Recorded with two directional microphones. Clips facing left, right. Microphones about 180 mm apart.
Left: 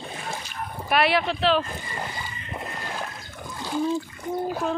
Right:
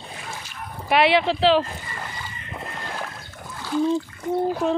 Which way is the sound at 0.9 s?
25° right (ahead or behind).